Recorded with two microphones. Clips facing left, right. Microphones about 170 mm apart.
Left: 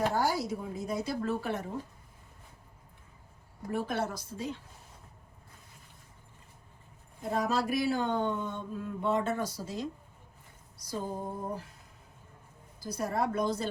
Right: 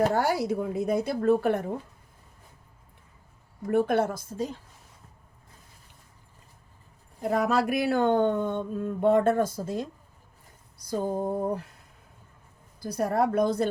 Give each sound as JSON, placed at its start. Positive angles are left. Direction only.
{"t": 0.1, "sound": "speech", "side_deg": -65}
{"t": 3.7, "sound": "speech", "side_deg": -55}
{"t": 7.2, "sound": "speech", "side_deg": -65}
{"t": 10.8, "sound": "mantra", "side_deg": -55}
{"t": 12.8, "sound": "speech", "side_deg": -60}